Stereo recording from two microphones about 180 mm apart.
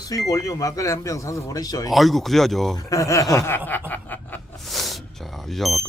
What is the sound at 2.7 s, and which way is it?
Chuckle, 20° left (ahead or behind).